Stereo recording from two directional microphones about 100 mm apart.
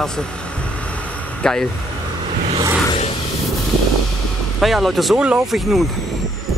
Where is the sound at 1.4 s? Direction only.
5° left (ahead or behind).